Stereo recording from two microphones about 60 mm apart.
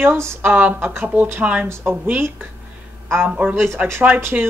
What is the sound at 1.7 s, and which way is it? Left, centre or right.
Speech, right.